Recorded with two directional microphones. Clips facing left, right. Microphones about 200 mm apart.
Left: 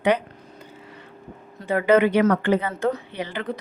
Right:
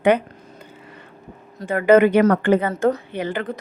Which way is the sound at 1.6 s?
45° right (ahead or behind).